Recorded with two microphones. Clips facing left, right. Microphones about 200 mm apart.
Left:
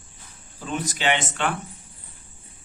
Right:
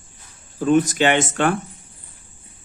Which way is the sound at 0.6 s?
50° right (ahead or behind).